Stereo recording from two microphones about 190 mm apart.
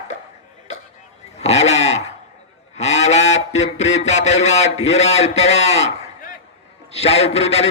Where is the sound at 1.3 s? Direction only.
35° left (ahead or behind).